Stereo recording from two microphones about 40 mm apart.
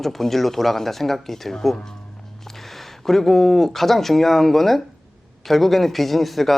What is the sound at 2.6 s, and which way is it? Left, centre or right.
Speech, centre.